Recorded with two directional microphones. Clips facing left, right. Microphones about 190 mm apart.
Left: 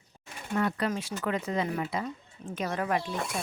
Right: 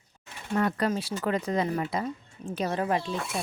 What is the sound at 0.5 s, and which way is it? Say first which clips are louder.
Speech: right 2 dB; 40° right (ahead or behind).